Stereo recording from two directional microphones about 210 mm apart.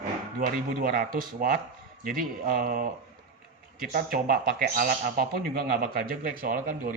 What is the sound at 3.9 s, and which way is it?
Speech, 45° right (ahead or behind).